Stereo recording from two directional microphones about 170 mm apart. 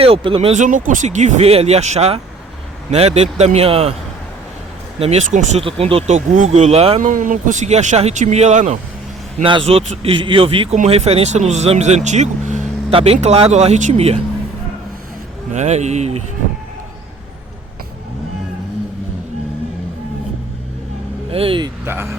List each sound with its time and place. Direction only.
0.0 s speech: 30° right (ahead or behind)
4.9 s speech: 40° right (ahead or behind)
7.0 s speech: 50° right (ahead or behind)
9.4 s speech: 30° right (ahead or behind)
15.5 s speech: 40° right (ahead or behind)
21.2 s speech: 35° right (ahead or behind)
21.8 s speech: 15° right (ahead or behind)